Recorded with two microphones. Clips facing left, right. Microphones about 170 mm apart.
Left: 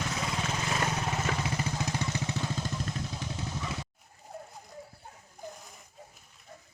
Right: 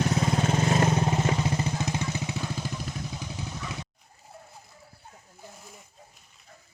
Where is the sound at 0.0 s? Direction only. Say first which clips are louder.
Right 8 dB; 40° right (ahead or behind).